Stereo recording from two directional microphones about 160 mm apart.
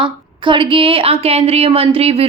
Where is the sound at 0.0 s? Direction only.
30° right (ahead or behind).